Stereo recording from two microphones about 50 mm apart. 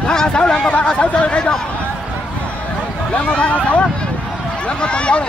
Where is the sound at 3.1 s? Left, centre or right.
Left.